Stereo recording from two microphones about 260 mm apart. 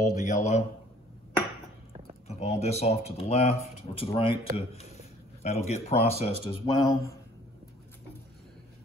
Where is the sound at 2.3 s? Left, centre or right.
Left.